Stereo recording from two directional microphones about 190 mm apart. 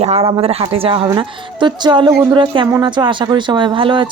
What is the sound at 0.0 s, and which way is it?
A woman's voice, 30° right (ahead or behind).